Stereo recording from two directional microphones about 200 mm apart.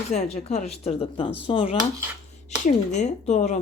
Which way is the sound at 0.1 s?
35° left (ahead or behind).